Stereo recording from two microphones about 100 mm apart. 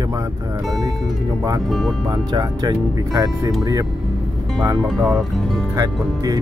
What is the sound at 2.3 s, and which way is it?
Speech, 40° right (ahead or behind).